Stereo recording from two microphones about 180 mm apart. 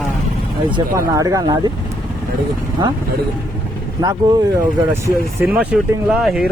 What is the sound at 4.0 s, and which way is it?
Speech, 20° right (ahead or behind).